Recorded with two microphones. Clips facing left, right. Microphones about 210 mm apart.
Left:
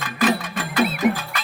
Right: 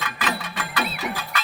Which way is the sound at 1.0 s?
55° left (ahead or behind).